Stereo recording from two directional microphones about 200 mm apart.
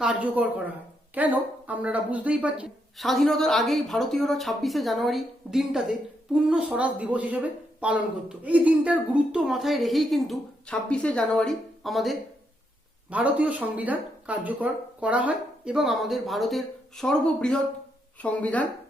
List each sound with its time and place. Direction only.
0.0 s a woman's voice: 5° right (ahead or behind)